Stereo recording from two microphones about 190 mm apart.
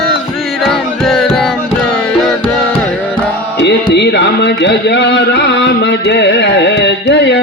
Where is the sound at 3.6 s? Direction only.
65° left (ahead or behind).